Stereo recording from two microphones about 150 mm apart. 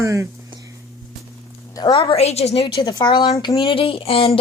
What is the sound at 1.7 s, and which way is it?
A woman's voice, 30° left (ahead or behind).